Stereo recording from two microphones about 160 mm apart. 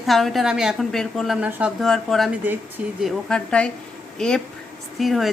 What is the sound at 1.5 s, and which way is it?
Speech, 10° right (ahead or behind).